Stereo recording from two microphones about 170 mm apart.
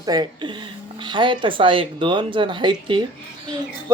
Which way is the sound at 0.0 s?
25° right (ahead or behind).